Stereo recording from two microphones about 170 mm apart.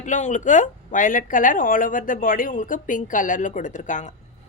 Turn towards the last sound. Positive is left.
turn(degrees=45)  # may be behind; listen again after turning